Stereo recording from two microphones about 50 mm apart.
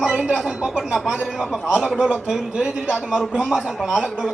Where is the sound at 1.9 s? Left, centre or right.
Right.